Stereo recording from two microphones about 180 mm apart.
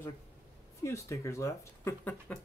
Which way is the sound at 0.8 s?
15° left (ahead or behind).